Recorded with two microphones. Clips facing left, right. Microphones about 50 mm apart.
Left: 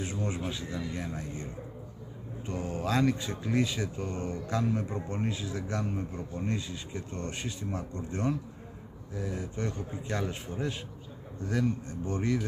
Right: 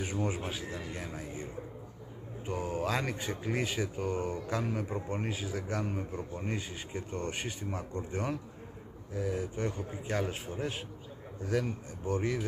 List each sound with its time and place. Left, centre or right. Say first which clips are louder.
0.0 s speech: right 1 dB; centre
0.7 s a man's voice: left 4 dB; centre
3.0 s speech: left 6 dB; right
3.5 s a man's voice: left 5 dB; centre